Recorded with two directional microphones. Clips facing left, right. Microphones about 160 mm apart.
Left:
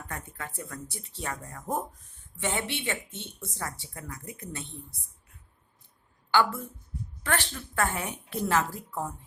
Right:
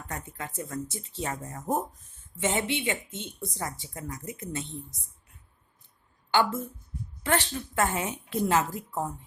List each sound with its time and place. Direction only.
0.1 s a woman's voice: 20° right (ahead or behind)
6.3 s a woman's voice: 20° right (ahead or behind)